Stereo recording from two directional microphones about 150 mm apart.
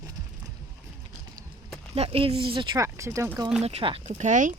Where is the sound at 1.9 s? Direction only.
40° right (ahead or behind).